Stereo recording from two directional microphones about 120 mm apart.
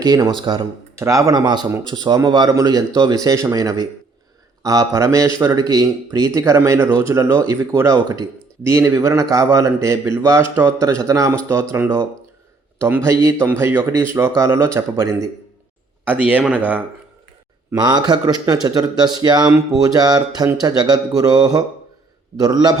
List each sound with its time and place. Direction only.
0.0 s speech: 35° right (ahead or behind)
0.9 s a man's voice: 25° right (ahead or behind)
7.9 s speech: 35° right (ahead or behind)
8.6 s a man's voice: 20° right (ahead or behind)
13.1 s a man's voice: 25° right (ahead or behind)
16.0 s speech: 15° right (ahead or behind)
17.7 s speech: 35° right (ahead or behind)